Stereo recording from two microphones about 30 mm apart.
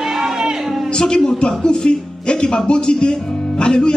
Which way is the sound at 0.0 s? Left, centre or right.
Centre.